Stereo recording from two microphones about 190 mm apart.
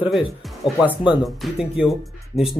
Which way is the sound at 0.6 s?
25° left (ahead or behind).